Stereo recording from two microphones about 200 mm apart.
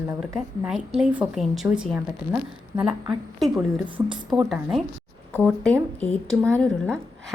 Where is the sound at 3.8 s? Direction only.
25° right (ahead or behind).